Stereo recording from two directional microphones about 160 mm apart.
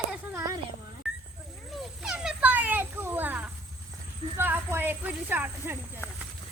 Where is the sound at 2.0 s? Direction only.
5° right (ahead or behind).